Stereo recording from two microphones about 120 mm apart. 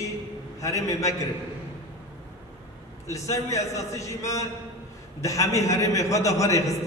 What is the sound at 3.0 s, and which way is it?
A man's voice, 25° left (ahead or behind).